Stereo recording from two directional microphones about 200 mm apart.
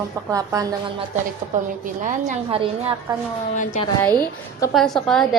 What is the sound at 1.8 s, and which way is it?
A woman's voice, 40° right (ahead or behind).